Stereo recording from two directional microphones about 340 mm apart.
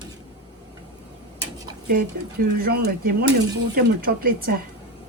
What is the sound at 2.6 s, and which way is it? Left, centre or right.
Speech, right.